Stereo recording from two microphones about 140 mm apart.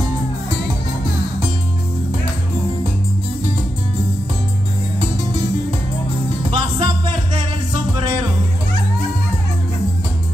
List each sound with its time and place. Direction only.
6.5 s music: 40° right (ahead or behind)